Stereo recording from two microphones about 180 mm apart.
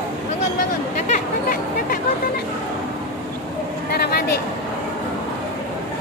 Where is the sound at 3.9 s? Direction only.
60° left (ahead or behind).